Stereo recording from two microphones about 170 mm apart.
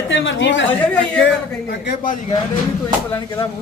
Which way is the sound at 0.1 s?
90° left.